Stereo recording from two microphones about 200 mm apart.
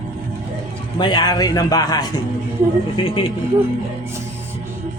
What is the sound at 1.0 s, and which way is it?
Speech, 20° left (ahead or behind).